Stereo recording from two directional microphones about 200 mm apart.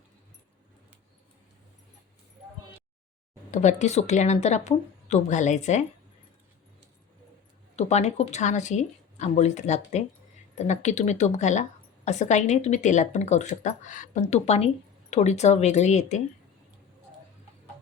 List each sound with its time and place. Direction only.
3.5 s speech: 35° left (ahead or behind)
7.8 s speech: 35° left (ahead or behind)